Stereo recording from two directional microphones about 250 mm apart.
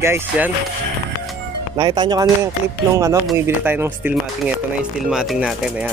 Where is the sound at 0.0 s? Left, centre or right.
Centre.